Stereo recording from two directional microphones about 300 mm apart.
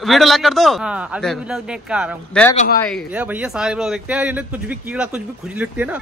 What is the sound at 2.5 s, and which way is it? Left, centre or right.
Speech, left.